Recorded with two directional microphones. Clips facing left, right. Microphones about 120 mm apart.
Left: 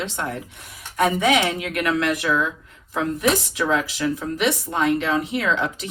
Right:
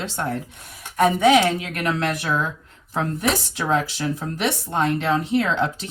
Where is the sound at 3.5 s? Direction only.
35° right (ahead or behind).